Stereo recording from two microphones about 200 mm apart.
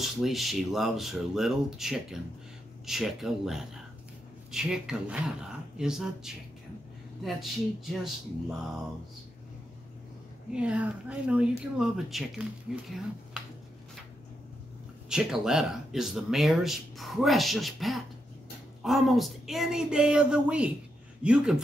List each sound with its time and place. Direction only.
0.0 s speech: centre (ahead or behind)
10.5 s speech: 5° right (ahead or behind)
15.0 s speech: 5° right (ahead or behind)